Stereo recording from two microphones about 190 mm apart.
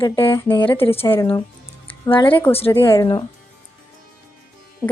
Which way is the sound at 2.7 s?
15° left (ahead or behind).